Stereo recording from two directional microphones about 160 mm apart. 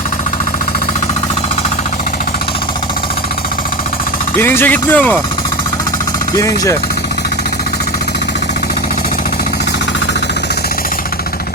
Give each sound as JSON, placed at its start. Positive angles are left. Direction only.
{"t": 4.4, "sound": "speech", "side_deg": 15}
{"t": 6.3, "sound": "speech", "side_deg": 20}